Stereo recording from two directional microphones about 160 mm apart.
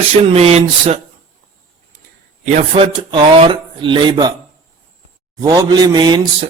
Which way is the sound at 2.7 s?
30° right (ahead or behind).